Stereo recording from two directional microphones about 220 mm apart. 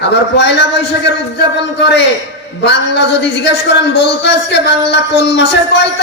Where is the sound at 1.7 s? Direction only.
50° left (ahead or behind).